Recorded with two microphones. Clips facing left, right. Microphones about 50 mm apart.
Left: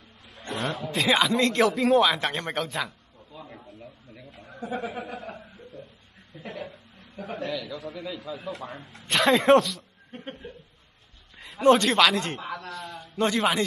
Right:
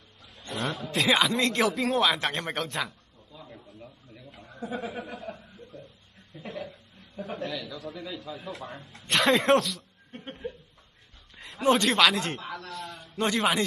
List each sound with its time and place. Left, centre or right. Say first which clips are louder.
0.5 s a man's voice: left 2 dB; centre
3.3 s a sound: left 3 dB; left
4.3 s speech: left 2 dB; centre
7.2 s a man's voice: left 3 dB; centre